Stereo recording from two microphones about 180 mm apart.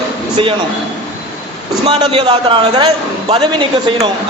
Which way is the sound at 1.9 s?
25° right (ahead or behind).